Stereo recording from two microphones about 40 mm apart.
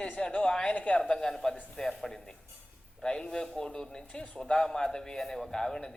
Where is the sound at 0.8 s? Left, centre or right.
Left.